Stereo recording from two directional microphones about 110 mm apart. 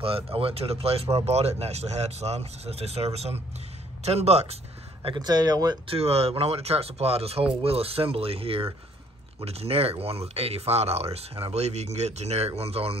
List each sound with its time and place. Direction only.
0.0 s speech: 60° right (ahead or behind); by 4.6 s 75° right (ahead or behind)
5.0 s speech: 40° right (ahead or behind)
5.9 s speech: 65° right (ahead or behind)